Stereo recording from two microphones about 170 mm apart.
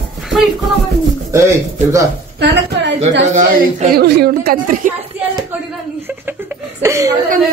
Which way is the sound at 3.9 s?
70° right (ahead or behind).